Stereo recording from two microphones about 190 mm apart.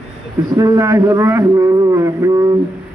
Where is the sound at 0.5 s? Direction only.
20° right (ahead or behind).